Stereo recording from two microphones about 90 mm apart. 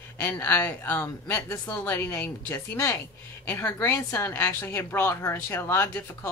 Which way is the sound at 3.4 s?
20° left (ahead or behind).